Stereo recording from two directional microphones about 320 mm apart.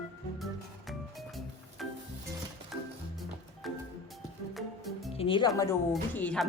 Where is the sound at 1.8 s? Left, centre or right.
Centre.